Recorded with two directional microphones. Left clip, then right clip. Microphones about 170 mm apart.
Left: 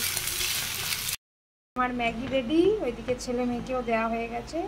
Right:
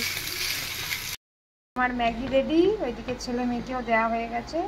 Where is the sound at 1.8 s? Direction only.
10° left (ahead or behind).